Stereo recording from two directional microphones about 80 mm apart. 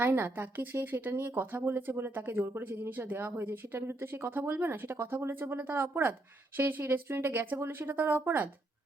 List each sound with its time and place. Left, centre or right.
0.0 s speech: right